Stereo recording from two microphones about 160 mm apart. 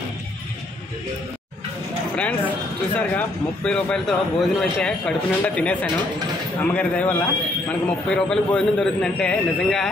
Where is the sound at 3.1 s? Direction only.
5° left (ahead or behind).